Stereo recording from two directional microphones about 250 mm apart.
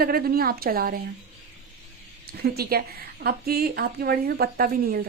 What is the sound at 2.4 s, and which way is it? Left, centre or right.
A woman's voice, right.